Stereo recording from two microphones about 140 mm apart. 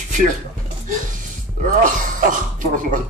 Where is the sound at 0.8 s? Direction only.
65° right (ahead or behind).